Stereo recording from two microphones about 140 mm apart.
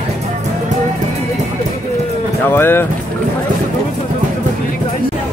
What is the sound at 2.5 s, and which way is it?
Speech, 15° left (ahead or behind).